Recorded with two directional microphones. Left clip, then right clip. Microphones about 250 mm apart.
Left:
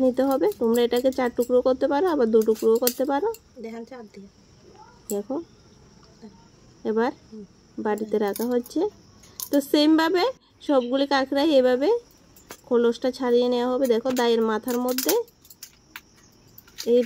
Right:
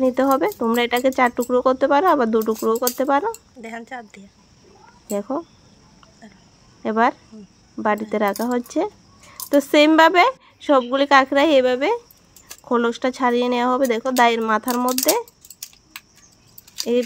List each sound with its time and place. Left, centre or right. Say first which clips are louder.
0.0 s speech: right 3 dB; centre
3.6 s speech: right 5 dB; centre
6.8 s speech: right 6 dB; centre